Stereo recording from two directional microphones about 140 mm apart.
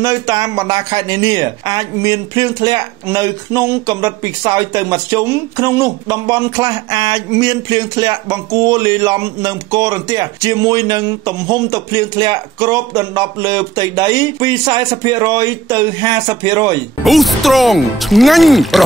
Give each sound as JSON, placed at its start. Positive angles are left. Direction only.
{"t": 0.0, "sound": "speech", "side_deg": -25}
{"t": 17.0, "sound": "speech", "side_deg": 0}